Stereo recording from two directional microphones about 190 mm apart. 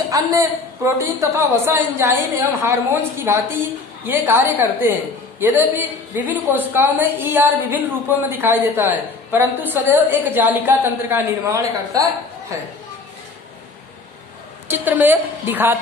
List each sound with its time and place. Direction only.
0.1 s a woman's voice: 20° right (ahead or behind)
14.7 s a woman's voice: 10° right (ahead or behind)